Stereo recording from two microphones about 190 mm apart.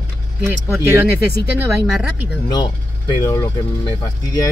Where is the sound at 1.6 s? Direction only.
5° right (ahead or behind).